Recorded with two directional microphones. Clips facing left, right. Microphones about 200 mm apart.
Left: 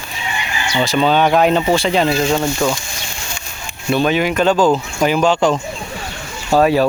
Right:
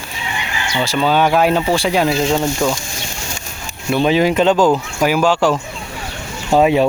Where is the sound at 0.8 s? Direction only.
10° right (ahead or behind).